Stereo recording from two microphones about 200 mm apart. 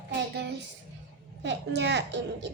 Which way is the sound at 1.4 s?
60° right (ahead or behind).